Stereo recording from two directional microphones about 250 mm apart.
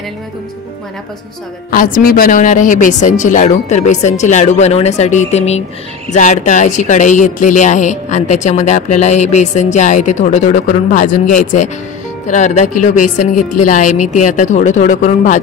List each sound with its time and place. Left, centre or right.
1.7 s speech: left